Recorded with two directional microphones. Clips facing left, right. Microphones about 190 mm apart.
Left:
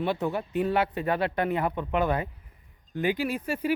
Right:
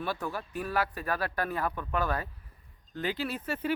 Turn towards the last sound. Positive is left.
turn(degrees=10)  # may be behind; listen again after turning